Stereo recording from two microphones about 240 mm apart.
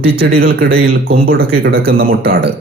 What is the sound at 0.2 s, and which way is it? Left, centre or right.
A man's voice, right.